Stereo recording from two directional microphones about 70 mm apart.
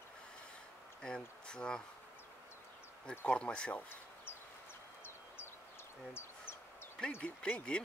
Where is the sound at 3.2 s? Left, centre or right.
Centre.